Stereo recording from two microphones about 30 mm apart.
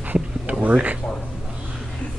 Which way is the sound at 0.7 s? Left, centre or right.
Right.